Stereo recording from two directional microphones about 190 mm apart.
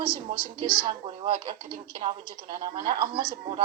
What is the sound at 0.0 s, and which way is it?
Speech, 25° right (ahead or behind).